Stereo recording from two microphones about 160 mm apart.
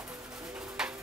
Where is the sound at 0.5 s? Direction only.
5° right (ahead or behind).